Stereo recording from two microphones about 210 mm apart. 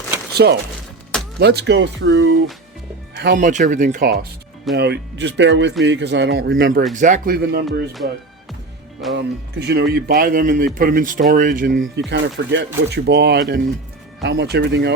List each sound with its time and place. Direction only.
0.3 s speech: 50° right (ahead or behind); by 2.4 s 65° right (ahead or behind)
3.2 s speech: 45° right (ahead or behind)
3.9 s speech: 45° right (ahead or behind)
6.9 s speech: 35° right (ahead or behind)
9.1 s speech: 50° right (ahead or behind)
11.9 s speech: 55° right (ahead or behind)